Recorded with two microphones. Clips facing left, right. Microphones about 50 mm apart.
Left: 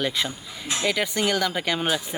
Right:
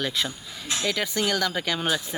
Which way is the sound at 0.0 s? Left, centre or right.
Centre.